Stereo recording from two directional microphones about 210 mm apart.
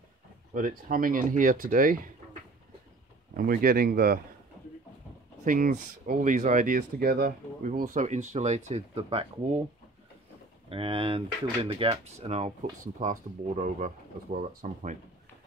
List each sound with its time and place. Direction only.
0.6 s speech: 40° right (ahead or behind)
3.3 s speech: 45° right (ahead or behind)
5.4 s speech: 40° right (ahead or behind)
10.7 s speech: 25° right (ahead or behind)